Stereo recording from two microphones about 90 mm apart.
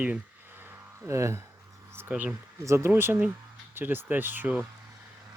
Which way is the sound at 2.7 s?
30° right (ahead or behind).